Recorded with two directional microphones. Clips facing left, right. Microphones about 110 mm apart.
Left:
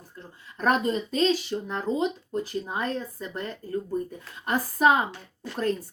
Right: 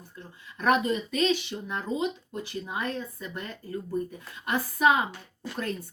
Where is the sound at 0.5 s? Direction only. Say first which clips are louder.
Even; 35° left (ahead or behind).